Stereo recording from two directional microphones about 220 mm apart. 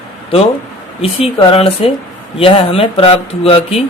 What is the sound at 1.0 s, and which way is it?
Speech, 25° left (ahead or behind).